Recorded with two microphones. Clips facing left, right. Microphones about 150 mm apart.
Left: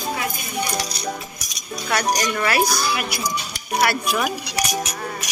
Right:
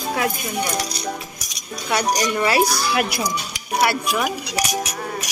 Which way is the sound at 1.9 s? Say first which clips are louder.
Right 1 dB; 15° right (ahead or behind).